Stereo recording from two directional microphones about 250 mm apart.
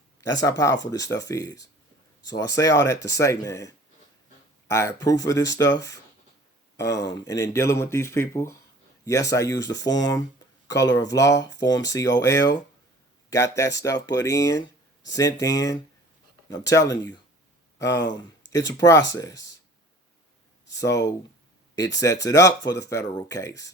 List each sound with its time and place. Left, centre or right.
0.2 s speech: centre
4.7 s speech: centre
20.7 s speech: centre